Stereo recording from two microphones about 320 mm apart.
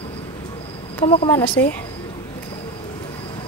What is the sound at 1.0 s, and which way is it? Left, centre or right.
Speech, centre.